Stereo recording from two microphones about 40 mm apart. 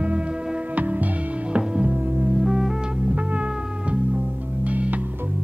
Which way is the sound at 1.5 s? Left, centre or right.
Right.